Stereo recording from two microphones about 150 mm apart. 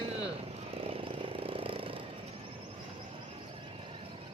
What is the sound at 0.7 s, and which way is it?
Vehicle, 40° right (ahead or behind).